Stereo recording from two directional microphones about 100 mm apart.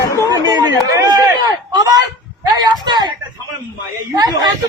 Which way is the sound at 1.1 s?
40° right (ahead or behind).